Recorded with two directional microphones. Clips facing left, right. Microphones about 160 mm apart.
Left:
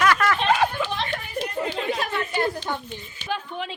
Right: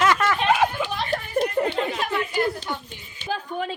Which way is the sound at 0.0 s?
20° right (ahead or behind).